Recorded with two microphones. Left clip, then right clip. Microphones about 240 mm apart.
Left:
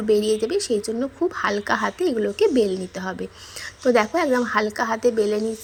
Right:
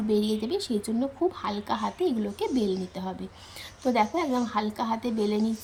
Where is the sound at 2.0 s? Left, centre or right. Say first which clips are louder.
Left 8 dB; centre.